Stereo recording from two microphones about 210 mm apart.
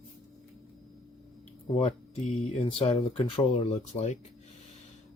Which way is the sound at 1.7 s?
30° left (ahead or behind).